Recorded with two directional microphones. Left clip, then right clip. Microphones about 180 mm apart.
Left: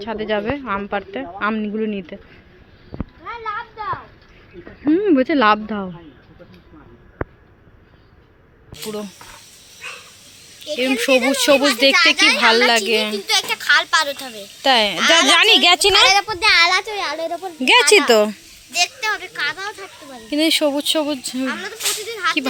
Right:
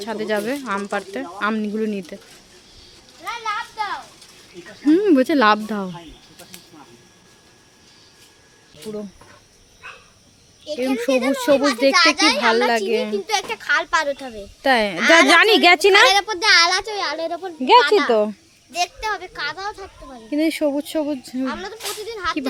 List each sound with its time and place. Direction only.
0.0 s speech: 10° right (ahead or behind)
3.2 s children playing: 65° right (ahead or behind)
4.9 s speech: 20° right (ahead or behind)
10.8 s a woman's voice: centre (ahead or behind)
12.1 s speech: 15° right (ahead or behind)
12.4 s a woman's voice: centre (ahead or behind)
13.1 s a child's voice: 30° right (ahead or behind)
14.6 s a child's voice: 25° right (ahead or behind)
17.7 s a woman's voice: centre (ahead or behind)
18.7 s a child's voice: 30° right (ahead or behind)
20.3 s speech: 10° right (ahead or behind)
21.4 s a child's voice: 20° right (ahead or behind)